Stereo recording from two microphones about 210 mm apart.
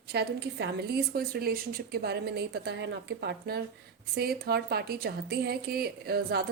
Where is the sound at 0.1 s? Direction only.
50° right (ahead or behind).